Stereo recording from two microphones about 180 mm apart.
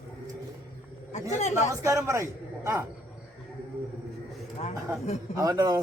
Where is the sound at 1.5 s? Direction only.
15° right (ahead or behind).